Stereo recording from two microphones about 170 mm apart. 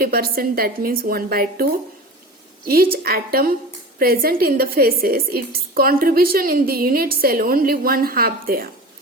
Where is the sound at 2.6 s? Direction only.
60° right (ahead or behind).